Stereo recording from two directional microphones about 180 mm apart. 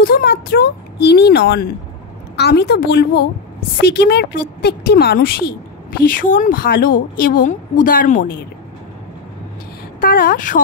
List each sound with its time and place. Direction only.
0.0 s a woman's voice: 60° left (ahead or behind)
9.9 s a woman's voice: 55° left (ahead or behind)